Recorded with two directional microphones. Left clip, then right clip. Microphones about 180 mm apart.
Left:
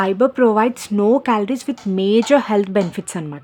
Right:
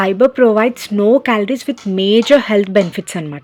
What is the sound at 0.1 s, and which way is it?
Speech, 5° right (ahead or behind).